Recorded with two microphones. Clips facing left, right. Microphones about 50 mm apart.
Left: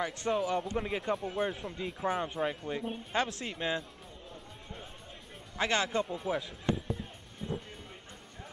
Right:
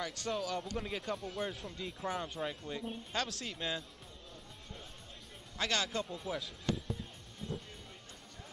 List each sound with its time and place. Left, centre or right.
0.0 s speech: left
5.6 s speech: left
6.9 s music: centre